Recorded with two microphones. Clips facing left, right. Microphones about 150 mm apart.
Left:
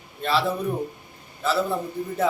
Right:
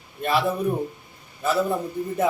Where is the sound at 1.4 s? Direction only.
15° right (ahead or behind).